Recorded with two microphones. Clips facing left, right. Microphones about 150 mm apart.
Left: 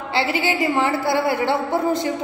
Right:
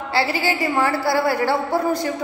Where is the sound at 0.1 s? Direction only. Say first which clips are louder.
Even; 20° left (ahead or behind).